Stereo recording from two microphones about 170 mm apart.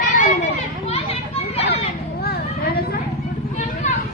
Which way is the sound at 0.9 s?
35° left (ahead or behind).